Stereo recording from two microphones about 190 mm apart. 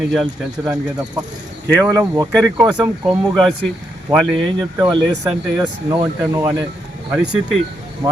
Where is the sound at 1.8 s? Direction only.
15° right (ahead or behind).